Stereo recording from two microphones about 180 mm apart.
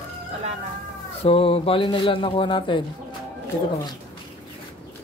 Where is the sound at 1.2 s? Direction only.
30° left (ahead or behind).